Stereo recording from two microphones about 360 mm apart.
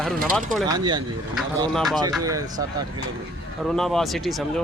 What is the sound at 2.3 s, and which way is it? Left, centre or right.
Speech, centre.